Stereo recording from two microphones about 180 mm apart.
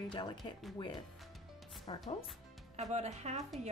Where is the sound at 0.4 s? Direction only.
Centre (ahead or behind).